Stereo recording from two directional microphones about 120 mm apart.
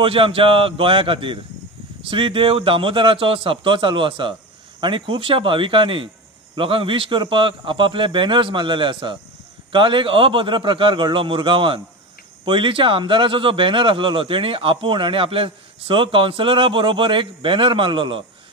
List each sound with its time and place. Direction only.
0.0 s speech: 50° right (ahead or behind)